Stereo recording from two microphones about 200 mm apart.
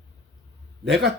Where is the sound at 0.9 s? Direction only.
55° right (ahead or behind).